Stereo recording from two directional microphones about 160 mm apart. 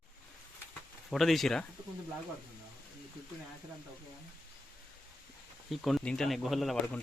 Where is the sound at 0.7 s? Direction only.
Centre (ahead or behind).